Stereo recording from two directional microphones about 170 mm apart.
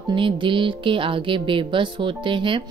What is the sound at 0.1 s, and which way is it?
Speech, 30° right (ahead or behind).